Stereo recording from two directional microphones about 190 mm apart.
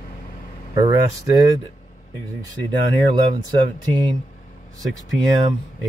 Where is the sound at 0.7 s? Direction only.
20° right (ahead or behind).